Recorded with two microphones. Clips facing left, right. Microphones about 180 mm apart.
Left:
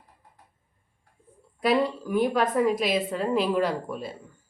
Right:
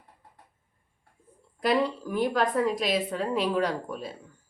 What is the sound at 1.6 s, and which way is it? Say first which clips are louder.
A woman's voice: left 2 dB; 5° left (ahead or behind).